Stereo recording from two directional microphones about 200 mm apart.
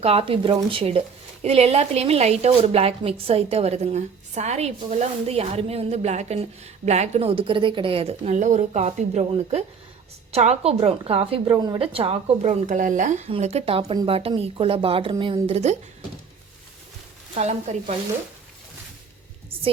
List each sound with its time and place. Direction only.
0.0 s a woman's voice: 30° right (ahead or behind)
17.3 s speech: 35° right (ahead or behind)